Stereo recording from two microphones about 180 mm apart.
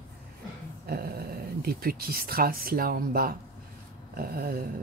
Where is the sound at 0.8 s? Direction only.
55° right (ahead or behind).